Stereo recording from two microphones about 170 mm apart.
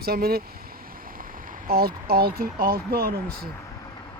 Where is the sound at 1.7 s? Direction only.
65° right (ahead or behind).